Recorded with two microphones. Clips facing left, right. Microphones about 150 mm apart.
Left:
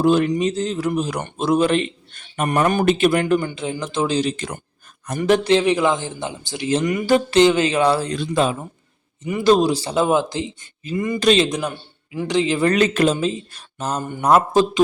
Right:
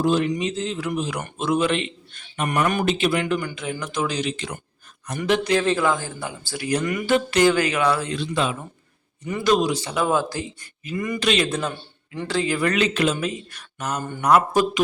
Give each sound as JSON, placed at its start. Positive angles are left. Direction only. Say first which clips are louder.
{"t": 0.0, "sound": "a man's voice", "louder": "left 4 dB", "side_deg": 55}
{"t": 0.3, "sound": "a man's voice", "louder": "left 4 dB", "side_deg": 40}
{"t": 2.8, "sound": "speech", "louder": "left 5 dB", "side_deg": 50}
{"t": 3.4, "sound": "speech", "louder": "left 4 dB", "side_deg": 30}
{"t": 5.4, "sound": "a man's voice", "louder": "left 4 dB", "side_deg": 25}
{"t": 9.4, "sound": "speech", "louder": "left 5 dB", "side_deg": 30}
{"t": 11.4, "sound": "a man's voice", "louder": "left 2 dB", "side_deg": 15}
{"t": 12.7, "sound": "speech", "louder": "left 4 dB", "side_deg": 45}
{"t": 13.1, "sound": "speech", "louder": "left 5 dB", "side_deg": 30}